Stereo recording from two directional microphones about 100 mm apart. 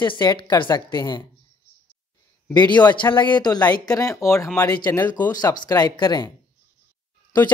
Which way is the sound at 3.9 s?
35° left (ahead or behind).